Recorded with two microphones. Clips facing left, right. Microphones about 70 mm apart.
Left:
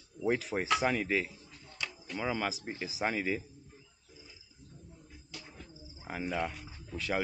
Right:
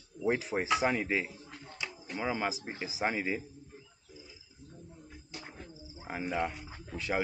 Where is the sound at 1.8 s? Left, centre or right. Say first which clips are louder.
Even; centre.